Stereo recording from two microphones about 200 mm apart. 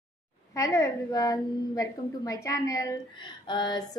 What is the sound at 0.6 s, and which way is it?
A woman's voice, 15° left (ahead or behind).